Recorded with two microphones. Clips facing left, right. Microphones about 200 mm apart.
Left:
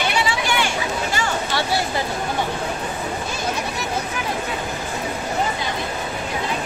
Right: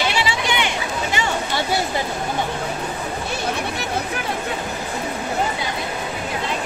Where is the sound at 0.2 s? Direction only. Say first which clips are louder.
Even; 20° right (ahead or behind).